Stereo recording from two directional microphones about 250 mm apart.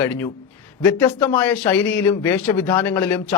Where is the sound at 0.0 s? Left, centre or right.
Centre.